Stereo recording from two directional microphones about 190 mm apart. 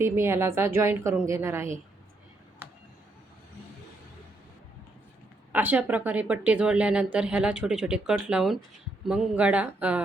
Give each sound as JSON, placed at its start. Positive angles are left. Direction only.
{"t": 0.0, "sound": "speech", "side_deg": -15}
{"t": 5.5, "sound": "speech", "side_deg": -10}